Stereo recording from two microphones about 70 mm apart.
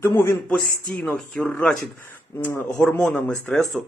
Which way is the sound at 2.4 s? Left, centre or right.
Left.